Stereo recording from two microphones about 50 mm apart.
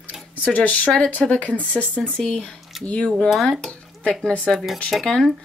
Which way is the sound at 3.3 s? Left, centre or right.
Centre.